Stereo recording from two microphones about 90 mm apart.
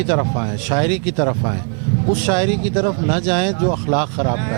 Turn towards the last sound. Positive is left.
turn(degrees=-20)  # may be behind; listen again after turning